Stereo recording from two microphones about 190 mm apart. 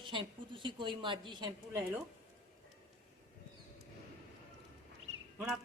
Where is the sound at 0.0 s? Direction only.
25° right (ahead or behind).